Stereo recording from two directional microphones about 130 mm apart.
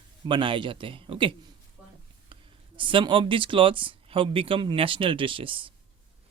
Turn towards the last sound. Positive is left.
turn(degrees=-40)  # may be behind; listen again after turning